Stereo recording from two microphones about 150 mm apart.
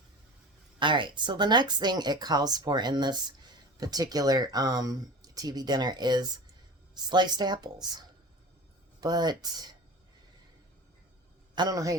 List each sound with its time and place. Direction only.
0.8 s speech: 30° right (ahead or behind)
11.5 s speech: 25° right (ahead or behind)